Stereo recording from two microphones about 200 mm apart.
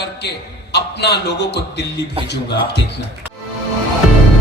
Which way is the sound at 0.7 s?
55° left (ahead or behind).